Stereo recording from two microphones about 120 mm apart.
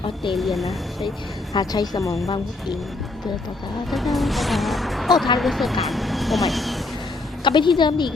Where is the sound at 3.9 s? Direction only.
Centre (ahead or behind).